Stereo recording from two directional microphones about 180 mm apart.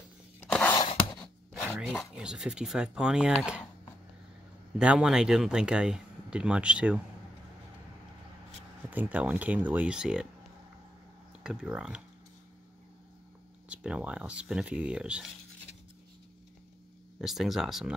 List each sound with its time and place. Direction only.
0.5 s a sound: 10° left (ahead or behind)
0.7 s a sound: 20° left (ahead or behind)
1.6 s dog: 5° right (ahead or behind)
2.1 s speech: 5° right (ahead or behind)
4.7 s speech: 5° right (ahead or behind)
8.9 s speech: 5° right (ahead or behind)
11.4 s speech: 5° right (ahead or behind)
13.7 s speech: 5° right (ahead or behind)
17.2 s speech: centre (ahead or behind)